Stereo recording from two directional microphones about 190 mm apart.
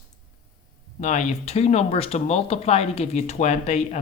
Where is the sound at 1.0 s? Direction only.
40° left (ahead or behind).